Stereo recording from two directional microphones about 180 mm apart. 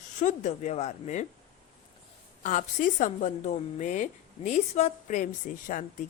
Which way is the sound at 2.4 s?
50° left (ahead or behind).